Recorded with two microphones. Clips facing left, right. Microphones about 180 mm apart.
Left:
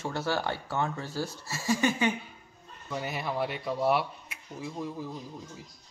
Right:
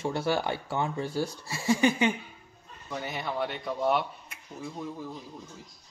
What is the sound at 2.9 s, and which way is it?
Speech, 5° left (ahead or behind).